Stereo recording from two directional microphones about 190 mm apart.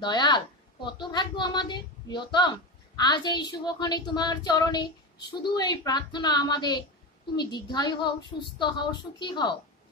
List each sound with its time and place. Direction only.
0.0 s a woman's voice: 20° left (ahead or behind)